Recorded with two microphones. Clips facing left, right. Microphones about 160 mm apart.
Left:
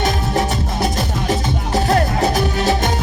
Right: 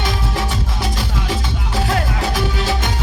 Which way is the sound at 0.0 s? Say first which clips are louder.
Left 4 dB; 45° left (ahead or behind).